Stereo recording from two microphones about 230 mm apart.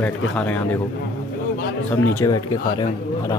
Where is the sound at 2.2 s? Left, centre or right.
Centre.